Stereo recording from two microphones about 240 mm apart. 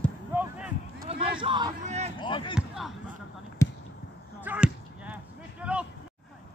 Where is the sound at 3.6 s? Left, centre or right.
Centre.